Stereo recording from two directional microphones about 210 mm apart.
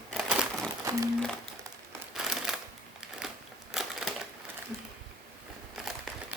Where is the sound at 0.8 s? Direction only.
15° right (ahead or behind).